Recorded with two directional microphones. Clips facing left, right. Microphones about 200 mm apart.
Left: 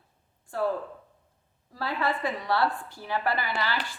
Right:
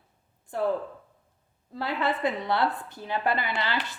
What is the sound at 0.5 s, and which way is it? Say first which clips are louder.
Speech: even; 20° right (ahead or behind).